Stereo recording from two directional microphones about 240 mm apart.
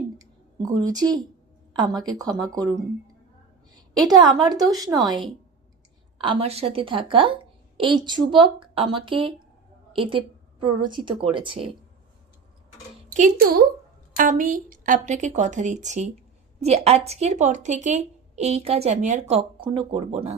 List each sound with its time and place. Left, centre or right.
0.9 s speech: centre
4.0 s a woman's voice: centre
13.1 s a woman's voice: right